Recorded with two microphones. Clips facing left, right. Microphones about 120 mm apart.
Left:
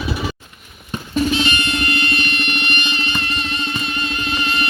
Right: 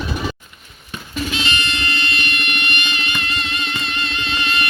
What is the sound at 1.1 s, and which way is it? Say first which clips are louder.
Music: left 5 dB; 40° left (ahead or behind).